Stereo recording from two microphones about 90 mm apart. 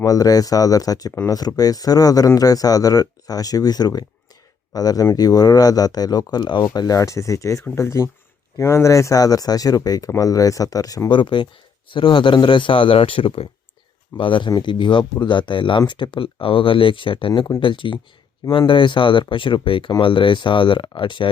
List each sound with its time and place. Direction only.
0.0 s speech: 45° left (ahead or behind)
6.7 s speech: 40° left (ahead or behind)
11.1 s a man's voice: 60° left (ahead or behind); by 13.5 s 90° left
14.2 s a man's voice: 65° left (ahead or behind)